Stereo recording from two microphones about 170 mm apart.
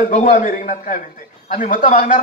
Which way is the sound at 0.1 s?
45° left (ahead or behind).